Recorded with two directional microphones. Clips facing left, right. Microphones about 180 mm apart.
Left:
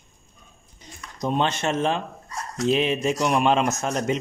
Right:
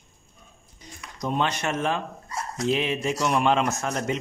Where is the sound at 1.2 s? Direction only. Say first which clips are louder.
Left 2 dB; 25° left (ahead or behind).